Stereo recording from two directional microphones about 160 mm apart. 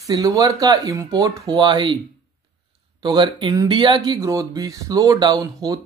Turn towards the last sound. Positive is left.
turn(degrees=-25)  # may be behind; listen again after turning